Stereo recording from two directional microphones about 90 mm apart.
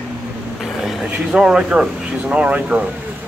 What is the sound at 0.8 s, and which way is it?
Speech, 5° right (ahead or behind).